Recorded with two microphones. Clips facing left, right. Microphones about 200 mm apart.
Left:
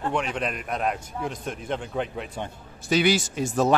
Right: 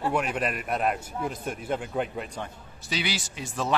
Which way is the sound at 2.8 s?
50° left (ahead or behind).